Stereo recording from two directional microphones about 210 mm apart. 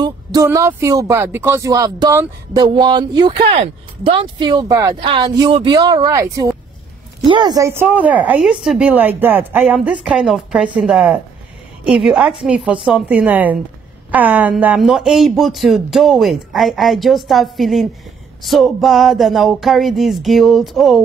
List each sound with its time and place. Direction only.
0.0 s speech: 15° right (ahead or behind); by 21.0 s centre (ahead or behind)